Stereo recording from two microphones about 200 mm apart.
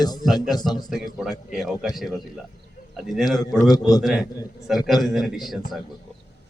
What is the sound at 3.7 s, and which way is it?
Speech, 20° left (ahead or behind).